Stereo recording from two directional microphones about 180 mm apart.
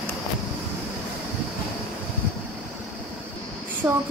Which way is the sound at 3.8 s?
20° right (ahead or behind).